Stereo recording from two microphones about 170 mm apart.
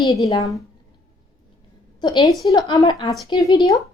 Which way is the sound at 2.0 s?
25° left (ahead or behind).